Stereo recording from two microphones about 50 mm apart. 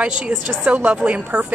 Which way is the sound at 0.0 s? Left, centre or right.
Right.